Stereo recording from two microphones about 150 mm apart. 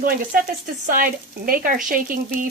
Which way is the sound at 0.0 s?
70° right (ahead or behind).